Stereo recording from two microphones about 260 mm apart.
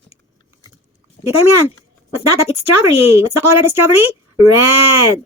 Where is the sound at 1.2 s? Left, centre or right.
Left.